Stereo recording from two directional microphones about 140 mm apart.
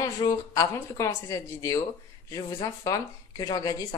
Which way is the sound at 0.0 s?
25° left (ahead or behind).